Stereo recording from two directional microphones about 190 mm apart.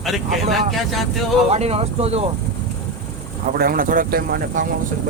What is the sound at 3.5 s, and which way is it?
Speech, 50° right (ahead or behind).